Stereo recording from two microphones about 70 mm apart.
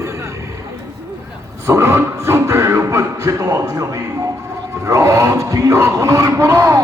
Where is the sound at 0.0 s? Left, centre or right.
Right.